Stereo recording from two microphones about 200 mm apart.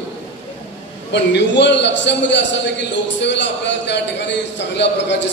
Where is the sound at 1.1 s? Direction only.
60° left (ahead or behind).